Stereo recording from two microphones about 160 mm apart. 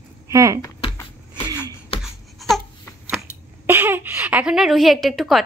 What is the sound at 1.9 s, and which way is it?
Babbling, 40° left (ahead or behind).